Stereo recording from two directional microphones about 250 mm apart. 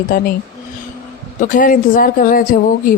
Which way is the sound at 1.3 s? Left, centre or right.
Left.